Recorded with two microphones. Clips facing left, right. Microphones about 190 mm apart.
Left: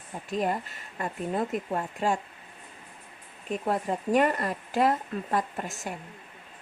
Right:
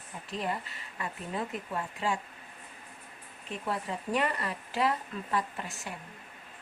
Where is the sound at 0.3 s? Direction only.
45° left (ahead or behind).